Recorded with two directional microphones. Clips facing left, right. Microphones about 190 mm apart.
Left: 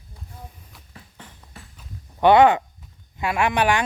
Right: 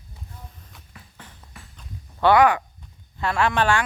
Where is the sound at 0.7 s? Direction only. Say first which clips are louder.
Even; centre (ahead or behind).